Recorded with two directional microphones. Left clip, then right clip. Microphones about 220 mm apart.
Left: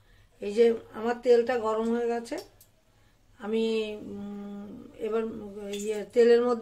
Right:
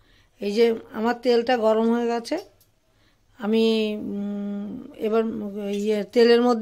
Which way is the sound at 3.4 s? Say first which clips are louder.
Right 7 dB; 45° right (ahead or behind).